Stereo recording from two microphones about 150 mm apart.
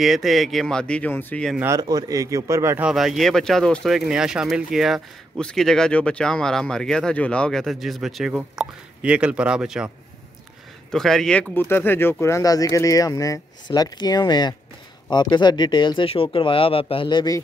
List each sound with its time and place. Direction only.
0.0 s speech: centre (ahead or behind)
1.6 s speech: 20° right (ahead or behind)
2.8 s speech: 5° right (ahead or behind)
10.9 s speech: 5° left (ahead or behind); by 17.4 s 30° left (ahead or behind)